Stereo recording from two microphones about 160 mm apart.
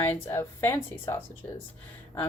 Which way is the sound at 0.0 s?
15° left (ahead or behind).